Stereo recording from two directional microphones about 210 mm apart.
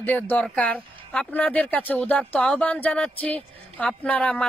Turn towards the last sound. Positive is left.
turn(degrees=5)  # may be behind; listen again after turning